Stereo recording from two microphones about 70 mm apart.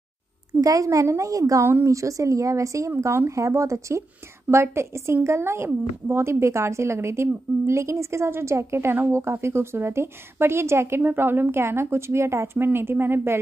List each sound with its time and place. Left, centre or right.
0.6 s a woman's voice: right